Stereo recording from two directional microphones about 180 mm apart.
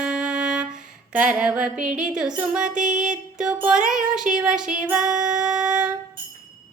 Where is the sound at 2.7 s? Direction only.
45° right (ahead or behind).